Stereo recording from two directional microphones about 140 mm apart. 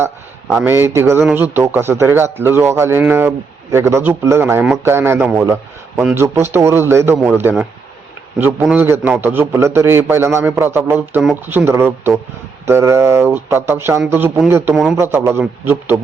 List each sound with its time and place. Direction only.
0.6 s a man's voice: 15° right (ahead or behind)